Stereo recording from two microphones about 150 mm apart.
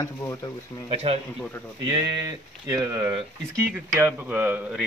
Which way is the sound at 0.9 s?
40° right (ahead or behind).